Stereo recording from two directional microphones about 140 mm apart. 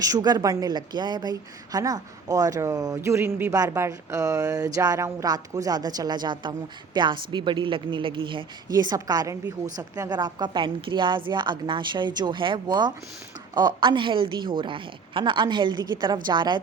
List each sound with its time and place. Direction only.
0.0 s a woman's voice: 25° right (ahead or behind)